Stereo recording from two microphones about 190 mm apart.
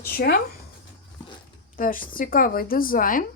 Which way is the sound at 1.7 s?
45° left (ahead or behind).